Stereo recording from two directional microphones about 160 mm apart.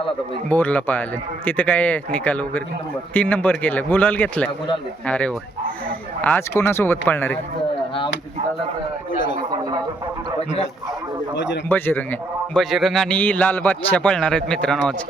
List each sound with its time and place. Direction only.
0.4 s a man's voice: 10° left (ahead or behind)
11.7 s a man's voice: 10° left (ahead or behind)
12.5 s a man's voice: centre (ahead or behind)